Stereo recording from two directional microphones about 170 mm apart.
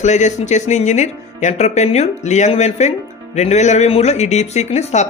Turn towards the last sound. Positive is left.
turn(degrees=40)  # may be behind; listen again after turning